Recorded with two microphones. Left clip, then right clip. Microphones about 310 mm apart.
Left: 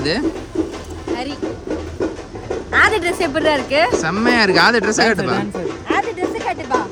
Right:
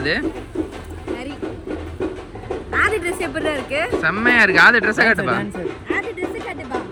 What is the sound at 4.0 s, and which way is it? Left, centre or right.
Speech, centre.